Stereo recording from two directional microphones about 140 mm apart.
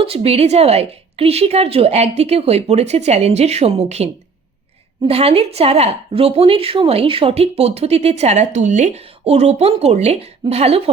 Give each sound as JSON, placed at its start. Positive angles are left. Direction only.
{"t": 0.0, "sound": "a woman's voice", "side_deg": -45}